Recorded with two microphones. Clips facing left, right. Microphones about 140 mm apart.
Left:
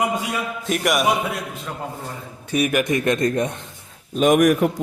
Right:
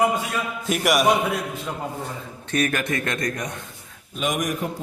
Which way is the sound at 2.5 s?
10° left (ahead or behind).